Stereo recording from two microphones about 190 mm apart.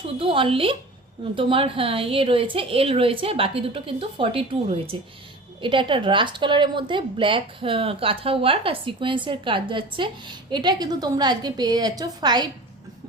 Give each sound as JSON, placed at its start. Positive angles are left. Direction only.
{"t": 0.0, "sound": "a woman's voice", "side_deg": -30}